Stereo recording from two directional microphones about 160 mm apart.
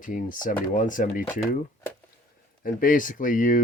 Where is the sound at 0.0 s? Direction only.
55° left (ahead or behind).